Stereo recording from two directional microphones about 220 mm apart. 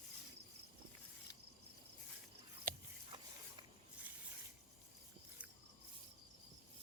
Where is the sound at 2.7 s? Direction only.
40° right (ahead or behind).